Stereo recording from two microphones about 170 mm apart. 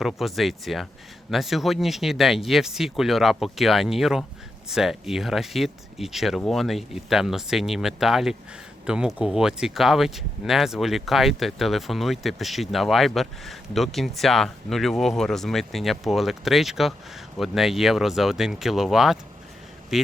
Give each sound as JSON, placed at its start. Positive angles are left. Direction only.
{"t": 0.0, "sound": "speech", "side_deg": 0}